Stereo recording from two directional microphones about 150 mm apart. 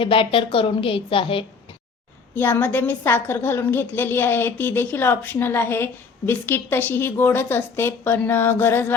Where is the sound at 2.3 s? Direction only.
15° left (ahead or behind).